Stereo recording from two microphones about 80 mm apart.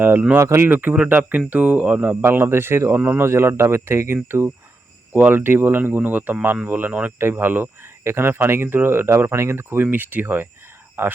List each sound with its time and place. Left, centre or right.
0.0 s speech: right
0.3 s speech: right